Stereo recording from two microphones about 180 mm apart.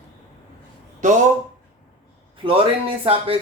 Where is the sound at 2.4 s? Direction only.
30° right (ahead or behind).